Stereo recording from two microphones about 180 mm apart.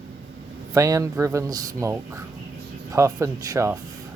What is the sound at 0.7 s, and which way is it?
Speech, 20° right (ahead or behind).